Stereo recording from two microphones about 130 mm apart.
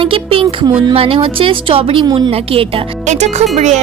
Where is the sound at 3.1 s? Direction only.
60° right (ahead or behind).